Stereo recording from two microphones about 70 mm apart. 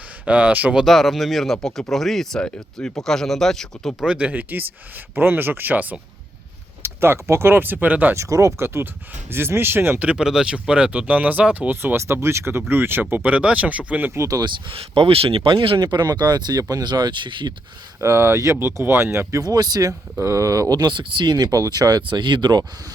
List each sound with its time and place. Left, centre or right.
0.3 s speech: right
0.9 s speech: centre
4.0 s speech: centre
6.8 s speech: right
8.1 s speech: right
10.0 s speech: centre
11.8 s speech: right
13.3 s speech: centre
14.3 s speech: right
15.8 s speech: right
18.0 s speech: right
19.3 s speech: right
20.1 s speech: right